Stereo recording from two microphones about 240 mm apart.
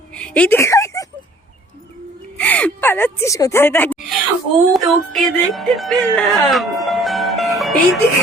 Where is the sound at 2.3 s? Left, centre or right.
Centre.